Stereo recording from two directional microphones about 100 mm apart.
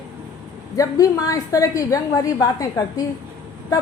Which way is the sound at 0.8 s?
35° left (ahead or behind).